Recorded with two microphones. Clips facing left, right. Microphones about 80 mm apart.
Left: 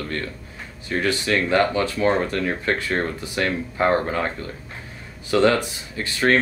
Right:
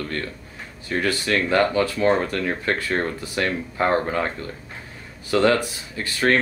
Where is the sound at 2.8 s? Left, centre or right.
Centre.